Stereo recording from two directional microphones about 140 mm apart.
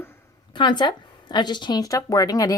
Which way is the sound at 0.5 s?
35° left (ahead or behind).